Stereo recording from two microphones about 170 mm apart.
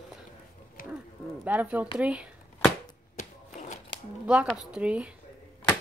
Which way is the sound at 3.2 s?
45° left (ahead or behind).